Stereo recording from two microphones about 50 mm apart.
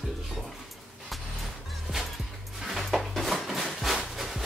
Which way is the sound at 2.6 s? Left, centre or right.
Centre.